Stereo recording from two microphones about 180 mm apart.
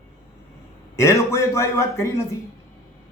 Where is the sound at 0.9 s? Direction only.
15° left (ahead or behind).